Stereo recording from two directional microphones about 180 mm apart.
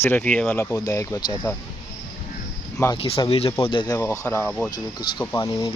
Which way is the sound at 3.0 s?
30° left (ahead or behind).